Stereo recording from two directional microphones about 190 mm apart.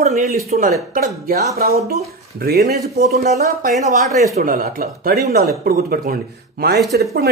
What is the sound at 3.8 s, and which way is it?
A man's voice, 40° right (ahead or behind).